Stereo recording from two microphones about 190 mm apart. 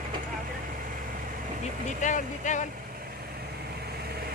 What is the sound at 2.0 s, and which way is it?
Speech, 40° left (ahead or behind).